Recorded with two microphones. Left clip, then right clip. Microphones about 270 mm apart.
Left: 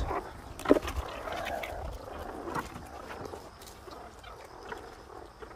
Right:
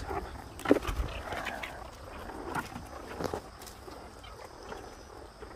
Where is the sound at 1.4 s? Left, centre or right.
Left.